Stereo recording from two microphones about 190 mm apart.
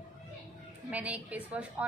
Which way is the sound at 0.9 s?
10° right (ahead or behind).